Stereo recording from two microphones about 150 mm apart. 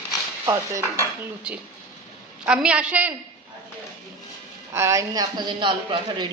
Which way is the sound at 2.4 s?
5° right (ahead or behind).